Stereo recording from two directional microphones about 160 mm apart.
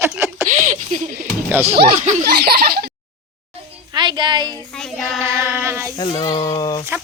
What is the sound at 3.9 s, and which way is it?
Speech, 30° right (ahead or behind).